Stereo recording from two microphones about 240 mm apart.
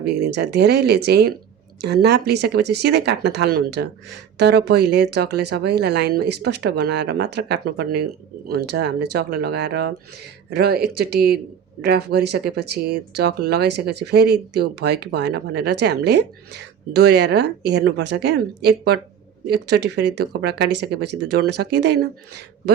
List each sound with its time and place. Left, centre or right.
0.0 s speech: right
20.4 s speech: right